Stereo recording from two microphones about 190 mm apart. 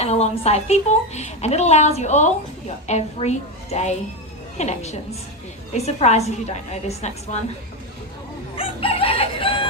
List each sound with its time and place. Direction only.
0.0 s a woman's voice: 35° left (ahead or behind)
8.5 s chicken: 30° left (ahead or behind)